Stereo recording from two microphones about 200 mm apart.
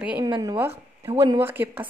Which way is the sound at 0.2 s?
20° right (ahead or behind).